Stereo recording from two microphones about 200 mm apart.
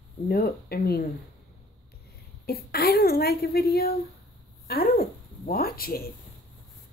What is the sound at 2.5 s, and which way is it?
A woman's voice, 50° left (ahead or behind).